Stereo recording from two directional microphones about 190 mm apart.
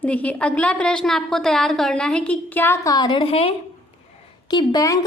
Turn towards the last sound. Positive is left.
turn(degrees=20)  # may be behind; listen again after turning